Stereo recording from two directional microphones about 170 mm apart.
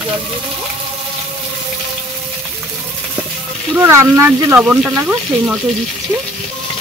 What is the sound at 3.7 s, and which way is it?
Speech, 15° right (ahead or behind).